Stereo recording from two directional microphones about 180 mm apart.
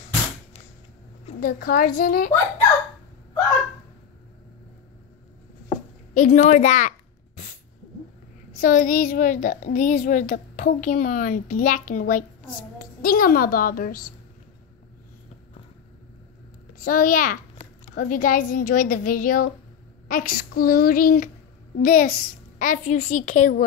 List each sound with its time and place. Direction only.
1.4 s a woman's voice: 55° left (ahead or behind)
6.1 s a woman's voice: 45° left (ahead or behind)
8.5 s a woman's voice: 50° left (ahead or behind)
16.7 s a woman's voice: 50° left (ahead or behind)